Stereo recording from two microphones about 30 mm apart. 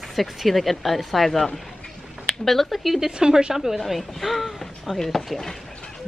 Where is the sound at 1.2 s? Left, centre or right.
Centre.